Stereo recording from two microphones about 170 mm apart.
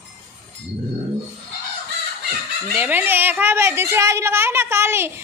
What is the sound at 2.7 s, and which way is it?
A woman's voice, 10° right (ahead or behind).